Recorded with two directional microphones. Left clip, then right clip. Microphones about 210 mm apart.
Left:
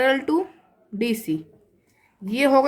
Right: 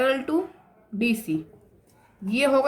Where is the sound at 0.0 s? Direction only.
40° left (ahead or behind).